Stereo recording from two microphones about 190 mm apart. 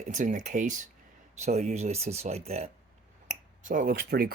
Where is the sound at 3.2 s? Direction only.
45° right (ahead or behind).